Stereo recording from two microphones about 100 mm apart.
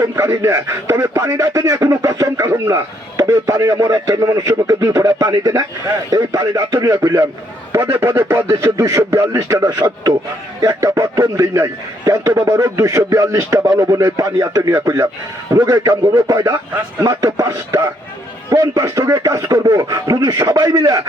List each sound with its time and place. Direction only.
0.0 s a man's voice: 25° right (ahead or behind)